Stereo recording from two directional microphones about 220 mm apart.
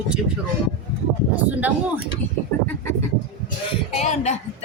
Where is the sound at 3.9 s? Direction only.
30° left (ahead or behind).